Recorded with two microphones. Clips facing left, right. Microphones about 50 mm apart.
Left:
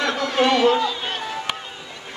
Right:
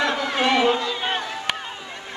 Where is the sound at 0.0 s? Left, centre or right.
Centre.